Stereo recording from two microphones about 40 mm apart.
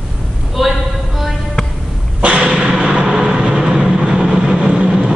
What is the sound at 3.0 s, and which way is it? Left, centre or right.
Vehicle, centre.